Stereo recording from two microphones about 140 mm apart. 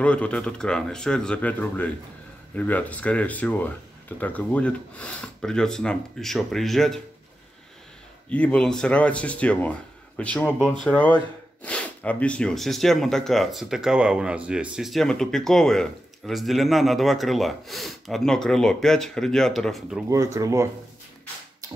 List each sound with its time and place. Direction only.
0.0 s speech: 10° left (ahead or behind)
8.3 s speech: 10° left (ahead or behind)
20.1 s speech: 20° right (ahead or behind)